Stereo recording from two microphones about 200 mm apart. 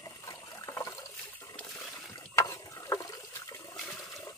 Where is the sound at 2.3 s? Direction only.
15° left (ahead or behind).